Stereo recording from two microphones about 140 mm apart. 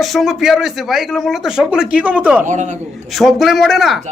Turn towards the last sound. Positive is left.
turn(degrees=0)  # may be behind; listen again after turning